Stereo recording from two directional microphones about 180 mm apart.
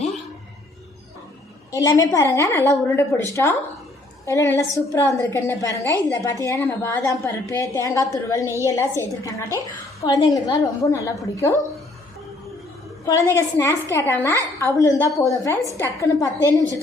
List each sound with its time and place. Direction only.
1.7 s a woman's voice: 15° left (ahead or behind)
4.3 s a woman's voice: 15° left (ahead or behind)
13.1 s a woman's voice: 15° left (ahead or behind)